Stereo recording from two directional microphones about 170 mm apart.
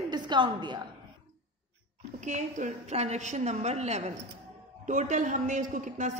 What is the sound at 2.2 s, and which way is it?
A woman's voice, 45° right (ahead or behind).